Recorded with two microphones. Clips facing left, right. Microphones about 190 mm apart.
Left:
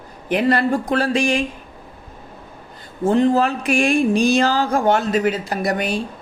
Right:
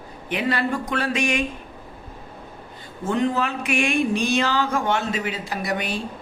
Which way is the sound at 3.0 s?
35° left (ahead or behind).